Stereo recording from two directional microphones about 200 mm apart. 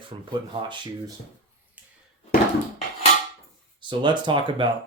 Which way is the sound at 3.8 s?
25° right (ahead or behind).